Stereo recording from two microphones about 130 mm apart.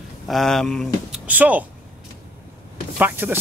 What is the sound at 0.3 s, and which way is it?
Speech, centre (ahead or behind).